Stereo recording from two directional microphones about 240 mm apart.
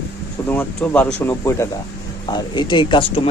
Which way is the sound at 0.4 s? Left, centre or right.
Centre.